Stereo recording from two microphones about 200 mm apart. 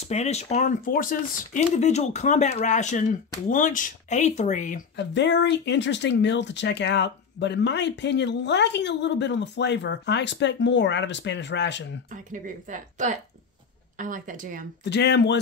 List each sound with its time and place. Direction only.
0.1 s speech: 35° left (ahead or behind)
4.9 s speech: 60° left (ahead or behind)
12.3 s speech: 40° right (ahead or behind)
14.9 s speech: 60° left (ahead or behind)